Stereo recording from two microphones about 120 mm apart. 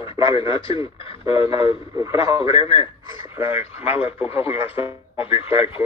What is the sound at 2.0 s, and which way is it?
Speech, 25° right (ahead or behind).